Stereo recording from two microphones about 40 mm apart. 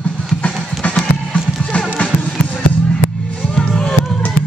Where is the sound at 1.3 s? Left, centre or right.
Left.